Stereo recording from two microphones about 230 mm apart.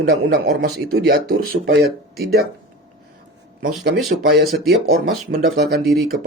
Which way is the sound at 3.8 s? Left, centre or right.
Right.